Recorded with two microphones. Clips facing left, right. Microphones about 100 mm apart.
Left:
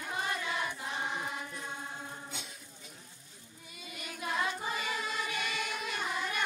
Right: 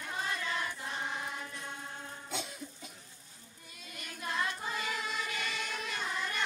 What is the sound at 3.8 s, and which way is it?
Choir, 5° left (ahead or behind).